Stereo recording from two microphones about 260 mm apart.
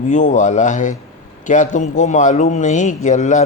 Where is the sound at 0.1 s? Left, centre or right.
Left.